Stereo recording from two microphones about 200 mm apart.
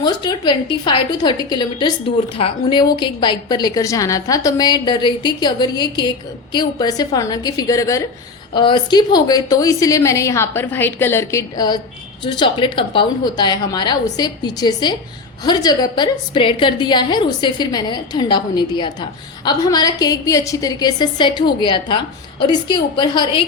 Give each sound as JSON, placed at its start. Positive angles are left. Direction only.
{"t": 0.0, "sound": "a woman's voice", "side_deg": 20}